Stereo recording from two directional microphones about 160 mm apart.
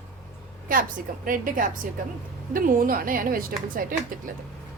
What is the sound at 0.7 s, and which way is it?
Speech, 60° right (ahead or behind).